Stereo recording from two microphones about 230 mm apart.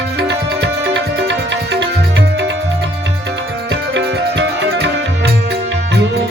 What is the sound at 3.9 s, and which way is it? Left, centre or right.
Music, right.